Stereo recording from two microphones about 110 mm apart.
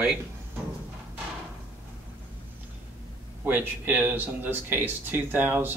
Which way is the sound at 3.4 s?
15° right (ahead or behind).